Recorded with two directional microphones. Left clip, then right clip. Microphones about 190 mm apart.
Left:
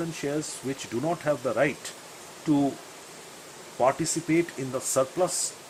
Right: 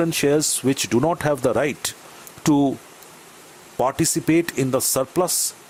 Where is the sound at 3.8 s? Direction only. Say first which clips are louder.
Right 4 dB; 55° right (ahead or behind).